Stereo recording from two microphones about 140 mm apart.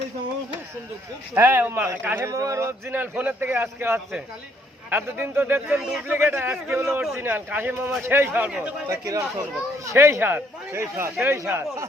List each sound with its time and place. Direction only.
1.3 s speech: 20° right (ahead or behind)
6.1 s speech: 15° right (ahead or behind)
6.9 s speech: 5° right (ahead or behind)
8.9 s speech: 25° right (ahead or behind)